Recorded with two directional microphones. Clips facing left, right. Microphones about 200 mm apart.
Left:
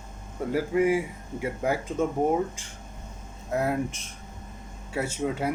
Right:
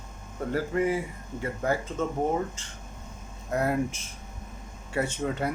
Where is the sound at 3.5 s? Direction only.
Centre (ahead or behind).